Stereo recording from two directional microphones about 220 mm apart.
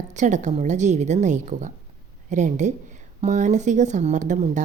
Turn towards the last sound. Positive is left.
turn(degrees=-35)  # may be behind; listen again after turning